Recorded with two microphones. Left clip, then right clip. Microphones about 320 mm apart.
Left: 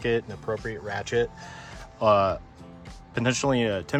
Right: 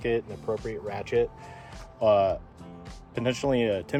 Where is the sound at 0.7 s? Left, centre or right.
Left.